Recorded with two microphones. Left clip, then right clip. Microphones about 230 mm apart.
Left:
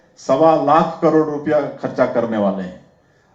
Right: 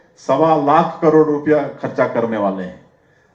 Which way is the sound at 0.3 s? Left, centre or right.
Right.